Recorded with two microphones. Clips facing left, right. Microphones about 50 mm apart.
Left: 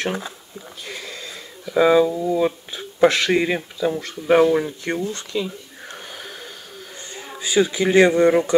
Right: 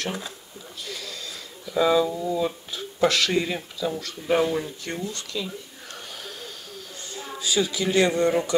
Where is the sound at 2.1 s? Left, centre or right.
Centre.